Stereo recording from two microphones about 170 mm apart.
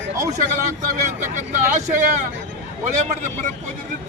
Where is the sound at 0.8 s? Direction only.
50° right (ahead or behind).